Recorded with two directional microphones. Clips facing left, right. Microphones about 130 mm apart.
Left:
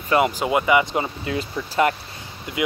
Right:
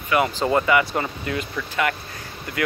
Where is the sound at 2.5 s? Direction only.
20° left (ahead or behind).